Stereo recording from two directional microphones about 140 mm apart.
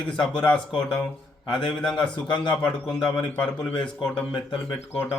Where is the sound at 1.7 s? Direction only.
5° left (ahead or behind).